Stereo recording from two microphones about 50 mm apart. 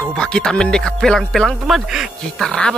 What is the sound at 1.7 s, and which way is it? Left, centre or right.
Speech, centre.